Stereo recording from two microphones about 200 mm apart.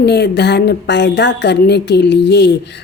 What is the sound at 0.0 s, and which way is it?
A woman's voice, 60° left (ahead or behind).